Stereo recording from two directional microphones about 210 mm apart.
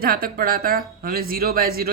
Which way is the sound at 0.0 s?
45° right (ahead or behind).